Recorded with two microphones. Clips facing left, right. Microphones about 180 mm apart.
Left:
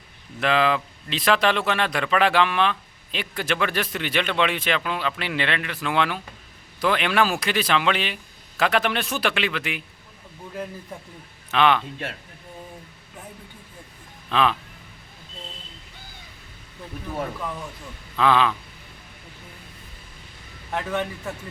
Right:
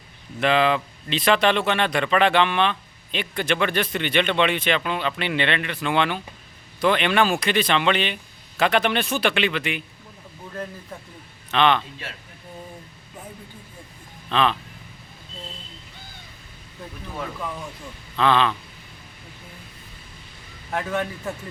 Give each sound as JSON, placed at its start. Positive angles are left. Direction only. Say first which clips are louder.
{"t": 0.3, "sound": "speech", "louder": "right 2 dB", "side_deg": 0}
{"t": 11.5, "sound": "speech", "louder": "even", "side_deg": 5}
{"t": 12.0, "sound": "speech", "louder": "left 5 dB", "side_deg": 55}
{"t": 14.3, "sound": "speech", "louder": "even", "side_deg": 5}
{"t": 18.2, "sound": "speech", "louder": "even", "side_deg": 5}
{"t": 20.7, "sound": "speech", "louder": "right 1 dB", "side_deg": 0}